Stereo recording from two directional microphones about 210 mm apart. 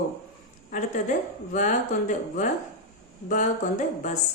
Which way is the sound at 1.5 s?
35° left (ahead or behind).